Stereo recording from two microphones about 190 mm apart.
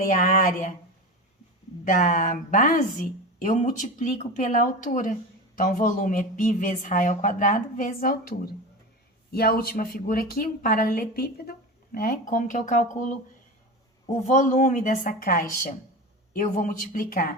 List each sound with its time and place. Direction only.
0.1 s speech: 45° left (ahead or behind)
1.8 s speech: 45° left (ahead or behind)
14.3 s speech: 40° left (ahead or behind)